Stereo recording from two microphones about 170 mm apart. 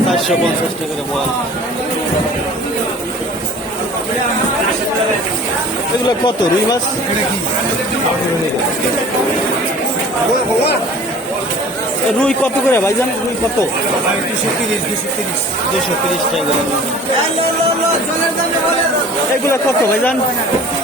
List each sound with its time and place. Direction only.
6.1 s speech: 25° left (ahead or behind)
12.2 s speech: 5° left (ahead or behind)